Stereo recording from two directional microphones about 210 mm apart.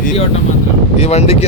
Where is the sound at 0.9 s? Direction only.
30° left (ahead or behind).